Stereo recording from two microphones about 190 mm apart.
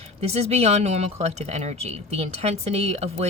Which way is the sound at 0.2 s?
30° right (ahead or behind).